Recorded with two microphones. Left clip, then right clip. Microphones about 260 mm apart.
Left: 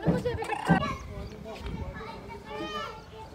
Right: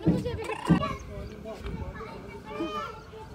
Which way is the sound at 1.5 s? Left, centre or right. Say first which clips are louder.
Left 1 dB; centre.